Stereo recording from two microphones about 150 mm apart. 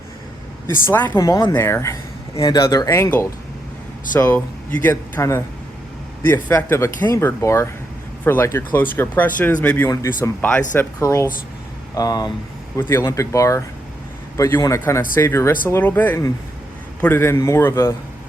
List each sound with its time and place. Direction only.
0.9 s speech: 10° left (ahead or behind)
1.1 s speech: 25° left (ahead or behind)